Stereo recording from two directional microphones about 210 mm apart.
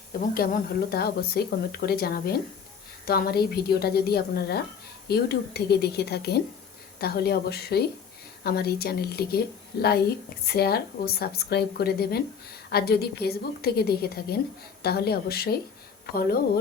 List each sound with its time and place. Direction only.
0.1 s speech: 45° left (ahead or behind)